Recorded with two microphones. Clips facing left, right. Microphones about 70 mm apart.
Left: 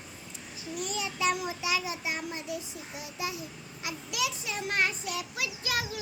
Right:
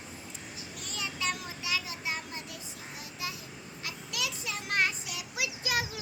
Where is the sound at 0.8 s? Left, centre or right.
Centre.